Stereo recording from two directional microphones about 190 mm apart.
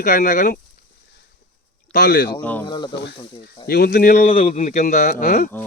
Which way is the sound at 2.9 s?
65° left (ahead or behind).